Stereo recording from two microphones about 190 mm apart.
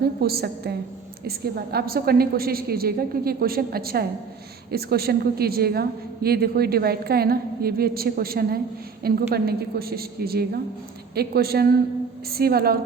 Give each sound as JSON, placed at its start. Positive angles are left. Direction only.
{"t": 0.2, "sound": "a woman's voice", "side_deg": -55}